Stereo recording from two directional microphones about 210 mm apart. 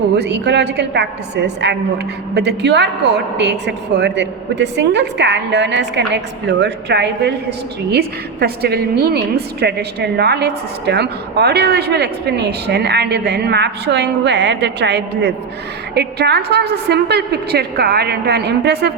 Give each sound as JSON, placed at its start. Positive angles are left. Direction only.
{"t": 0.2, "sound": "a woman's voice", "side_deg": -55}